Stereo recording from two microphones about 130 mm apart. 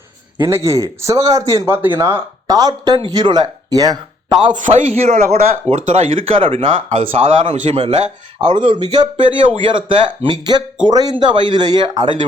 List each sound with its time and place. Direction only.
0.3 s a man's voice: 25° right (ahead or behind)
4.5 s a man's voice: 75° right (ahead or behind); by 7.5 s 45° right (ahead or behind)
7.5 s a man's voice: 65° right (ahead or behind)
8.5 s speech: 40° right (ahead or behind)